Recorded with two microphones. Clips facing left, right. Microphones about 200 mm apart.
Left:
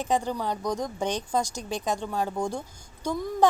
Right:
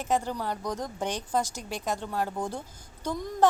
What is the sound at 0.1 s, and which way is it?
A woman's voice, 15° left (ahead or behind).